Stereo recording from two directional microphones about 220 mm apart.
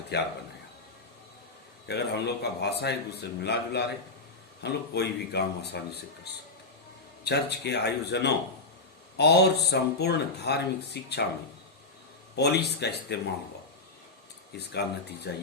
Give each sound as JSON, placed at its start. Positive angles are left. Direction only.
{"t": 0.1, "sound": "speech", "side_deg": 50}
{"t": 1.9, "sound": "speech", "side_deg": 50}
{"t": 12.4, "sound": "speech", "side_deg": 50}
{"t": 14.5, "sound": "speech", "side_deg": 50}